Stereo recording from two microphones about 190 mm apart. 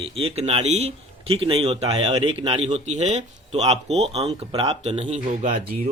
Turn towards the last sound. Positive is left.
turn(degrees=-40)  # may be behind; listen again after turning